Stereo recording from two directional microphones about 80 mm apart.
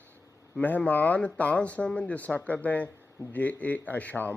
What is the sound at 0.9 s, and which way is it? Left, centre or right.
Speech, left.